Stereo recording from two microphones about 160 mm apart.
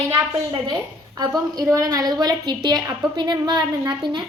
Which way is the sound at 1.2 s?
20° right (ahead or behind).